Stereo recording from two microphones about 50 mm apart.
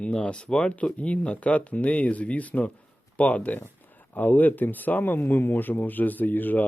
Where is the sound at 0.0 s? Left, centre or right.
Left.